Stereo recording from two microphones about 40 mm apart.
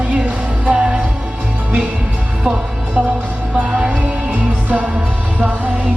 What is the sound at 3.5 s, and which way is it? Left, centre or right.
Music, right.